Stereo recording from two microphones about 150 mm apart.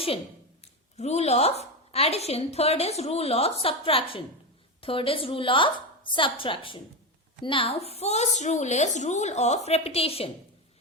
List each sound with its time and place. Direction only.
0.6 s a woman's voice: 45° left (ahead or behind)